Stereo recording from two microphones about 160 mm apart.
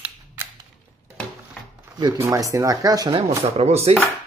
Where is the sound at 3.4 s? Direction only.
40° right (ahead or behind).